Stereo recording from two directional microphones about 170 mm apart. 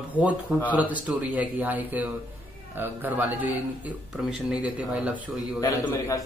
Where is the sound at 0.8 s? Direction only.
10° right (ahead or behind).